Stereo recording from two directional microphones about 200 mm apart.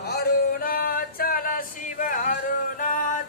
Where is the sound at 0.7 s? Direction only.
45° left (ahead or behind).